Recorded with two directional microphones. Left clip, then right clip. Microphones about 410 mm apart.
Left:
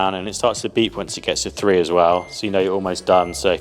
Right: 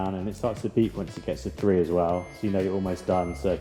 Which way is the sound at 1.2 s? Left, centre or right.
Centre.